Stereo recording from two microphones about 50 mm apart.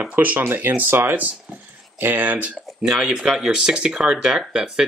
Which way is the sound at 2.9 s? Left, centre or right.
Centre.